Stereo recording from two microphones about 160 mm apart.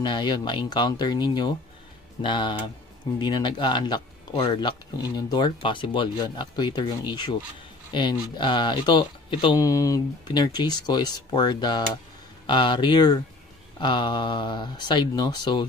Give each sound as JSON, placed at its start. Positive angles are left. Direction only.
{"t": 0.0, "sound": "a man's voice", "side_deg": 30}